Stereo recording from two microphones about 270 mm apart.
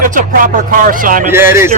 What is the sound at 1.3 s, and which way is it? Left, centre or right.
Speech, centre.